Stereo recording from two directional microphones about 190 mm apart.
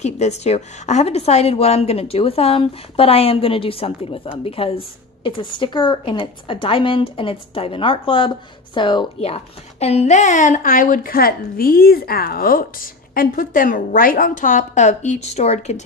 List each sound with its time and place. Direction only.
0.0 s a woman's voice: 35° left (ahead or behind)